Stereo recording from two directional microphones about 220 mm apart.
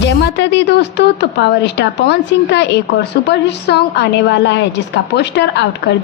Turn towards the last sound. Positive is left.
turn(degrees=50)  # may be behind; listen again after turning